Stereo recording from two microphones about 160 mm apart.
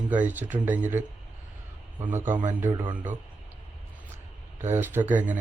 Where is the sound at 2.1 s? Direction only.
15° right (ahead or behind).